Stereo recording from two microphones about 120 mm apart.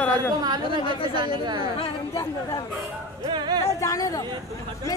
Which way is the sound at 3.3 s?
35° right (ahead or behind).